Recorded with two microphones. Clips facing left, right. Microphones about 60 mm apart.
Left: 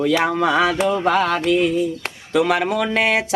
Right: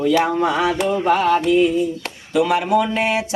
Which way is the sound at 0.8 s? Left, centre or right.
Left.